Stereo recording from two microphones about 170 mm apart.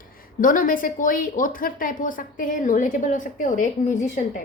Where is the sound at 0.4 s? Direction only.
50° left (ahead or behind).